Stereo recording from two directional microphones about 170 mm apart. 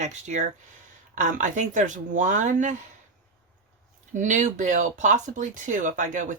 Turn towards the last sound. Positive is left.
turn(degrees=-50)  # may be behind; listen again after turning